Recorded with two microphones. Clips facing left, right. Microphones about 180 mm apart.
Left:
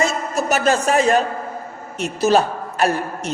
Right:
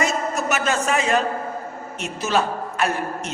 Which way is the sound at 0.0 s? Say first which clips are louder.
Left 2 dB; 35° left (ahead or behind).